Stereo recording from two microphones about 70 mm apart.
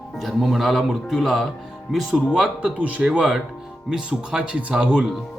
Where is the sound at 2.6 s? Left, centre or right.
Centre.